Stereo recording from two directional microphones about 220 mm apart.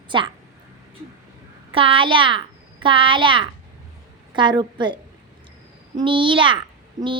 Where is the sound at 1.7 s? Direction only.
25° right (ahead or behind).